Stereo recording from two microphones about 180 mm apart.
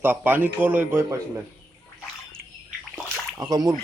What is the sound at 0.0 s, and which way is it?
A man's voice, 10° right (ahead or behind).